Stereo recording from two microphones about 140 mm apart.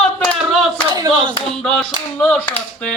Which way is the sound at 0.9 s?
25° right (ahead or behind).